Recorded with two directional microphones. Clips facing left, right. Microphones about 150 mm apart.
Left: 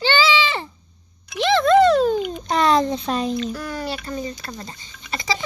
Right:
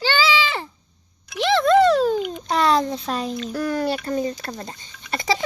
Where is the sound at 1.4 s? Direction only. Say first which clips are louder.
Left 1 dB; 5° right (ahead or behind).